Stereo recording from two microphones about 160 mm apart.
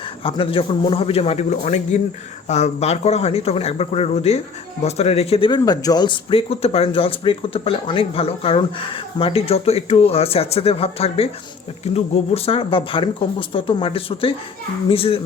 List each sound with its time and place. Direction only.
0.2 s speech: 35° left (ahead or behind)